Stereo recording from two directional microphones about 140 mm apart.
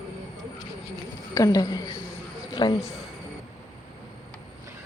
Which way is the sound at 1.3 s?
25° left (ahead or behind).